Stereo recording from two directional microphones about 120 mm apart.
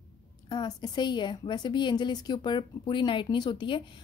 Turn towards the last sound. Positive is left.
turn(degrees=40)  # may be behind; listen again after turning